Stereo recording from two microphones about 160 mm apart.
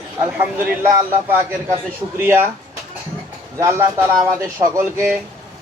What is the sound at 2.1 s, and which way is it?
Speech, 15° right (ahead or behind).